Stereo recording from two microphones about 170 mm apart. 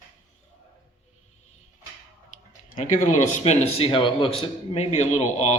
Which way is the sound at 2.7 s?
50° left (ahead or behind).